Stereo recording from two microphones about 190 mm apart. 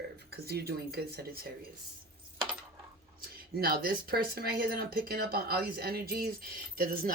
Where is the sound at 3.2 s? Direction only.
55° right (ahead or behind).